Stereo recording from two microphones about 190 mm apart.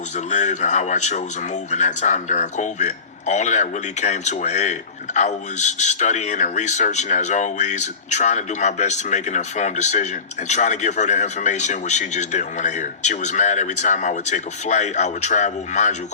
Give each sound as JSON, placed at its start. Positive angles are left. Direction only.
{"t": 0.3, "sound": "speech", "side_deg": 40}